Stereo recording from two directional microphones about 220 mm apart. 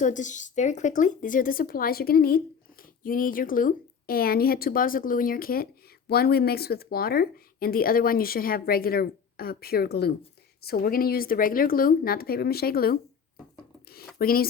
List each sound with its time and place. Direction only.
0.0 s speech: 35° left (ahead or behind)
13.8 s a sound: 45° left (ahead or behind)
14.2 s speech: 45° left (ahead or behind)